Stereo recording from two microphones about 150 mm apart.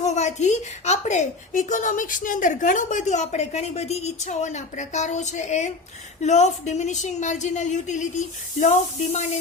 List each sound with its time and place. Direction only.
0.0 s a woman's voice: 50° left (ahead or behind)